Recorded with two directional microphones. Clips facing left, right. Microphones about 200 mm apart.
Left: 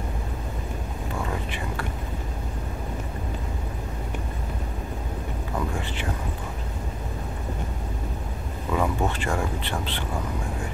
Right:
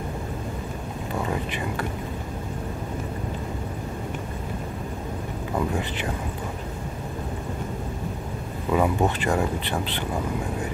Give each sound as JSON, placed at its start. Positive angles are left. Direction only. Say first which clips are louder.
{"t": 8.7, "sound": "speech", "louder": "right 3 dB", "side_deg": -20}